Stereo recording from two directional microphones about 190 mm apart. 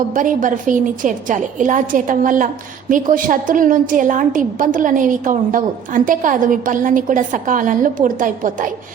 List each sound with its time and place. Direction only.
0.1 s a woman's voice: 45° right (ahead or behind)